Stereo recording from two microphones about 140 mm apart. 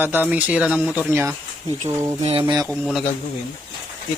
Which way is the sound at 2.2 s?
40° right (ahead or behind).